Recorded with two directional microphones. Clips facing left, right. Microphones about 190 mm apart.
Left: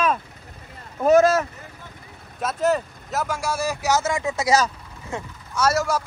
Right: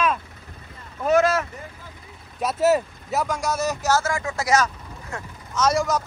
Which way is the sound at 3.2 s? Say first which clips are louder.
Even; 5° left (ahead or behind).